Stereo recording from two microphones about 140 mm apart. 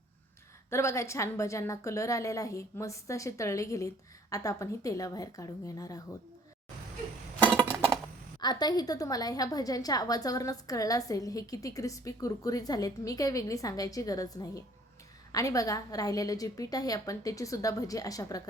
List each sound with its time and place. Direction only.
0.7 s a woman's voice: 20° left (ahead or behind)
8.4 s a woman's voice: 30° left (ahead or behind)